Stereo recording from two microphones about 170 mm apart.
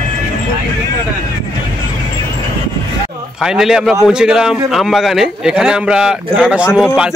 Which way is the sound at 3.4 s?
5° right (ahead or behind).